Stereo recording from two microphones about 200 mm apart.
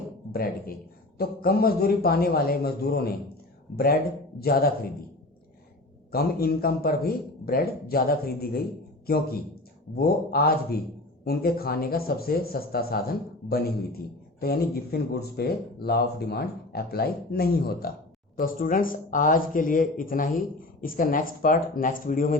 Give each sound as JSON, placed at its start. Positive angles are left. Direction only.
{"t": 0.3, "sound": "speech", "side_deg": 50}
{"t": 4.4, "sound": "speech", "side_deg": 50}
{"t": 6.1, "sound": "speech", "side_deg": 50}
{"t": 14.3, "sound": "speech", "side_deg": 50}